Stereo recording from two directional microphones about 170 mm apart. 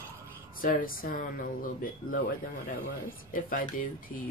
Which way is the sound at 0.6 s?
55° left (ahead or behind).